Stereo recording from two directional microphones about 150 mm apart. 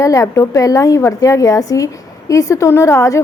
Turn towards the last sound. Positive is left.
turn(degrees=20)  # may be behind; listen again after turning